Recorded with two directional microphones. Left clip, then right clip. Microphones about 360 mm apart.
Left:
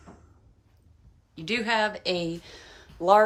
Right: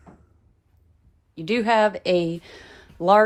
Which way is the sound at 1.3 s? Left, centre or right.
Centre.